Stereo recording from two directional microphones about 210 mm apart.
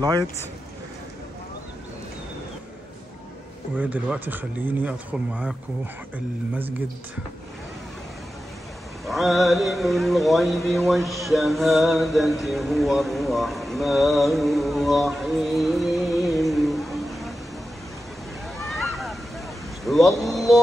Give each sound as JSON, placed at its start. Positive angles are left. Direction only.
{"t": 0.0, "sound": "speech", "side_deg": -20}
{"t": 3.7, "sound": "speech", "side_deg": -5}
{"t": 9.0, "sound": "speech", "side_deg": 0}
{"t": 18.6, "sound": "waves", "side_deg": 0}
{"t": 19.8, "sound": "a sound", "side_deg": 0}